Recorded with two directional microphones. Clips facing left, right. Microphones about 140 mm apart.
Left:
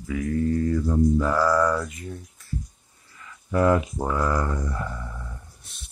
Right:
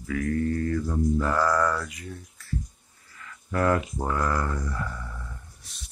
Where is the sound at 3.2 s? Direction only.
15° left (ahead or behind).